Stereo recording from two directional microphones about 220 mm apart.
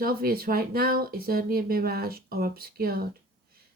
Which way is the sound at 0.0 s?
45° right (ahead or behind).